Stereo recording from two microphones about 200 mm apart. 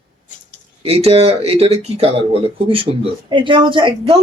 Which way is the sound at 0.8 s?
30° right (ahead or behind).